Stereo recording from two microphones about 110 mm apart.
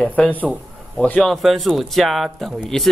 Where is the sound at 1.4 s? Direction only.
Centre (ahead or behind).